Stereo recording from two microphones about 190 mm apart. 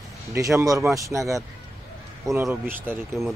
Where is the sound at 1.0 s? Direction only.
15° right (ahead or behind).